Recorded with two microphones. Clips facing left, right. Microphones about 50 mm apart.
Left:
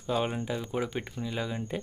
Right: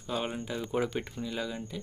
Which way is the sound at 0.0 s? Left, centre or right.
Centre.